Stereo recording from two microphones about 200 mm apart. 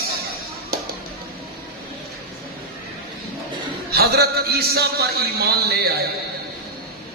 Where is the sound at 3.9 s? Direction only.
50° right (ahead or behind).